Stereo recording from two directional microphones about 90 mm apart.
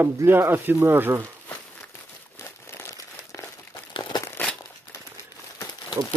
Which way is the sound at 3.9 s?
60° left (ahead or behind).